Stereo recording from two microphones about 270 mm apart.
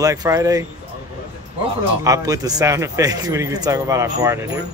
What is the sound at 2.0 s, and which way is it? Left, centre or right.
Speech, centre.